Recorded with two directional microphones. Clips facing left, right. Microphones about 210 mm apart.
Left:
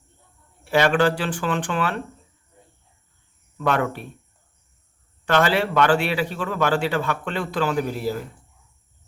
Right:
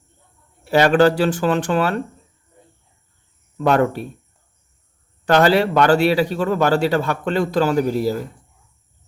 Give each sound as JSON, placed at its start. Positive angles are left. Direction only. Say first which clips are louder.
{"t": 0.6, "sound": "a man's voice", "louder": "right 5 dB", "side_deg": -40}
{"t": 3.6, "sound": "a man's voice", "louder": "right 6 dB", "side_deg": -40}
{"t": 5.2, "sound": "a man's voice", "louder": "right 5 dB", "side_deg": -40}